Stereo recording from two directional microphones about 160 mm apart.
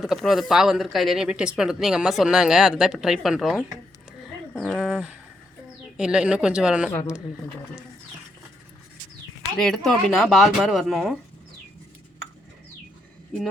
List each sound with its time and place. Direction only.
0.0 s speech: centre (ahead or behind)
4.8 s a sound: 10° right (ahead or behind)
6.0 s speech: 5° right (ahead or behind)
6.9 s speech: 20° left (ahead or behind)
9.4 s speech: 5° left (ahead or behind)